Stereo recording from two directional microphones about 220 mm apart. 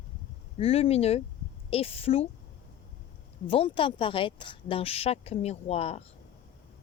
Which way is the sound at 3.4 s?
25° left (ahead or behind).